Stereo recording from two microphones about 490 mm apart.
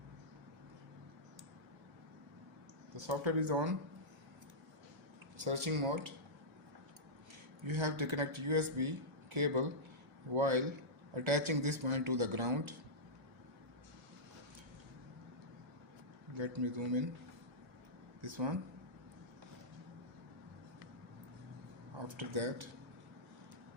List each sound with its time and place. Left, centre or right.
2.9 s speech: right
5.5 s speech: right
7.7 s speech: right
16.3 s speech: right
18.2 s speech: right
22.0 s speech: right